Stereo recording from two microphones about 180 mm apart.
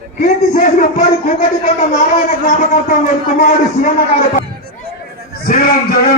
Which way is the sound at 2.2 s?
50° left (ahead or behind).